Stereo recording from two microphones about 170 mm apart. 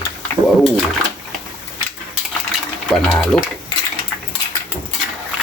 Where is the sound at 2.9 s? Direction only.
5° left (ahead or behind).